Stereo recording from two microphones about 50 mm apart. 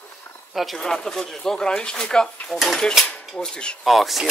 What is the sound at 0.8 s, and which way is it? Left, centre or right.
Speech, centre.